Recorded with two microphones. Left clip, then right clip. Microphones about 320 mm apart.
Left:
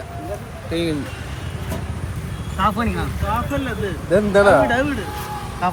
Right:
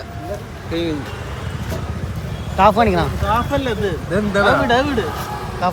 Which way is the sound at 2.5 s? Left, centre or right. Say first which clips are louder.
Right 8 dB; centre.